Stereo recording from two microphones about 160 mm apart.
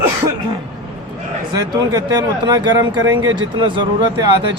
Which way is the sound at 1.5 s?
20° right (ahead or behind).